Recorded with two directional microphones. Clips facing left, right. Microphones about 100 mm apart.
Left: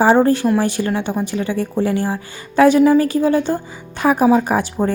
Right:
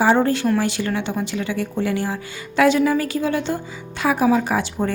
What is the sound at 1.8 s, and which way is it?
A woman's voice, 30° left (ahead or behind).